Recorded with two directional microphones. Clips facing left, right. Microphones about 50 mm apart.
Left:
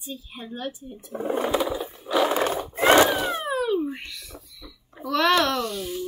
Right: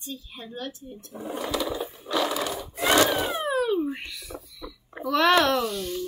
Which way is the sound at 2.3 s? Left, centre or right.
Left.